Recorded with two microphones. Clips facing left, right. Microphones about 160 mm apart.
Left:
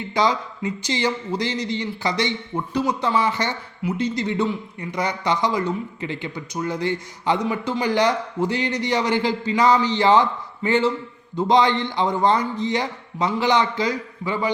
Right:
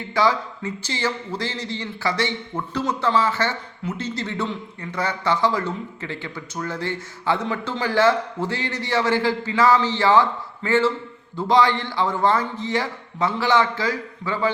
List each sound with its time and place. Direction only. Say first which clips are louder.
0.1 s a man's voice: right 1 dB; 20° left (ahead or behind)